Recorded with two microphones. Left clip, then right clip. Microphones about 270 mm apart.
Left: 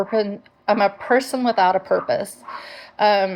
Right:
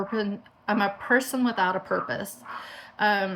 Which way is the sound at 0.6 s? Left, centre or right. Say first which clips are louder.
Left 8 dB; right.